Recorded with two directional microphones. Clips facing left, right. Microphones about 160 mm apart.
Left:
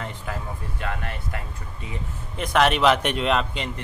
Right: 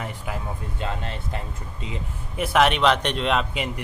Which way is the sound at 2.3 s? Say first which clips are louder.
Right 1 dB; 5° right (ahead or behind).